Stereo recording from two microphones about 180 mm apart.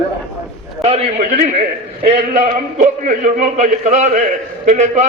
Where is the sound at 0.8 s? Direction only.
35° right (ahead or behind).